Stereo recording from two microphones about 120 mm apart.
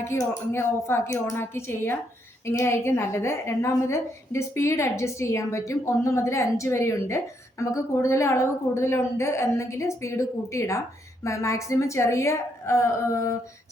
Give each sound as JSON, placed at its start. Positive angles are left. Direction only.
{"t": 0.0, "sound": "a woman's voice", "side_deg": 20}